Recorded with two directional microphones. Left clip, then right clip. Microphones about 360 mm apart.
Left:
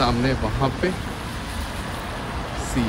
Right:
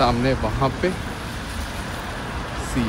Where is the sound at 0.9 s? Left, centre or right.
Left.